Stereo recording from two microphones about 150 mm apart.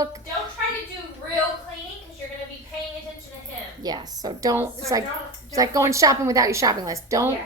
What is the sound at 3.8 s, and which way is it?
A woman's voice, 25° right (ahead or behind).